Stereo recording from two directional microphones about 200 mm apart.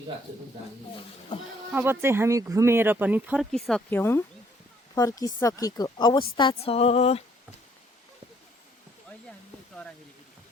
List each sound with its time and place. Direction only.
1.7 s speech: 10° right (ahead or behind)
3.5 s a woman's voice: 5° left (ahead or behind); by 7.2 s 30° left (ahead or behind)